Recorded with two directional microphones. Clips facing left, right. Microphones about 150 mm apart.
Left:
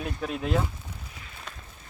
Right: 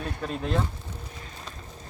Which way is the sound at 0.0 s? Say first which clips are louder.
Even; 10° left (ahead or behind).